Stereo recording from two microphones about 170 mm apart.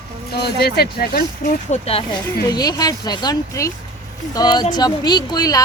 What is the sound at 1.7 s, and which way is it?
Speech, 35° left (ahead or behind).